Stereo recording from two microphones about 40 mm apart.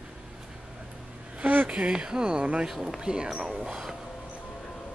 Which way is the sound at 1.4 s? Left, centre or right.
Right.